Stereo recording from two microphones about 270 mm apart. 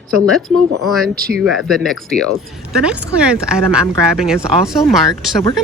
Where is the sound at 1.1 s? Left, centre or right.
Right.